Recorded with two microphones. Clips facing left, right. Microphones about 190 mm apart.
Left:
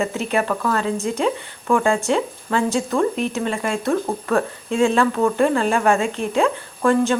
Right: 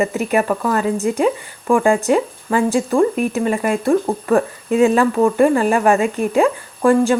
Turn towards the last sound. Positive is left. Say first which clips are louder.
# right 4 dB
turn(degrees=-10)  # may be behind; listen again after turning